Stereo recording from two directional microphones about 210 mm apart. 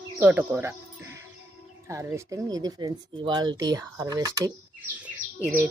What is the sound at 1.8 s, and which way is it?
Speech, 15° right (ahead or behind).